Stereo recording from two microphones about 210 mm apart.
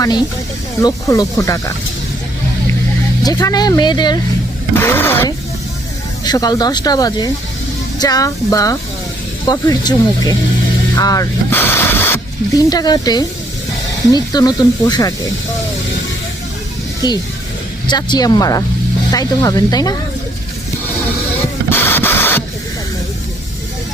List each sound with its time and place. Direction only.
0.8 s speech: 15° left (ahead or behind)
3.2 s speech: 15° left (ahead or behind)
4.7 s speech: 10° left (ahead or behind)
17.8 s speech: 20° left (ahead or behind)
21.7 s printer: 10° left (ahead or behind)